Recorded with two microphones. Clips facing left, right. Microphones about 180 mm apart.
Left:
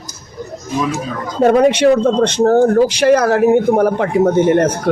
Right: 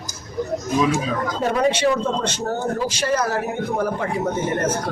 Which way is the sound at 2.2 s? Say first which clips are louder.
Left 13 dB; 75° left (ahead or behind).